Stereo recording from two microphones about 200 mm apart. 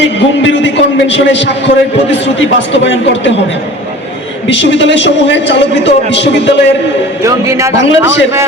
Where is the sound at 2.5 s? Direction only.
65° left (ahead or behind).